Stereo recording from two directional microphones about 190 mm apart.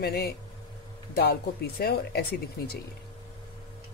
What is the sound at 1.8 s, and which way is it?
Speech, 55° left (ahead or behind).